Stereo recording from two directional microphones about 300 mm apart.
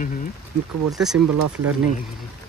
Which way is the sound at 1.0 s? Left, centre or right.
Centre.